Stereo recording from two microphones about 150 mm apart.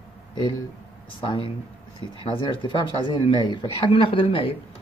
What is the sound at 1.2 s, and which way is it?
Speech, 35° left (ahead or behind).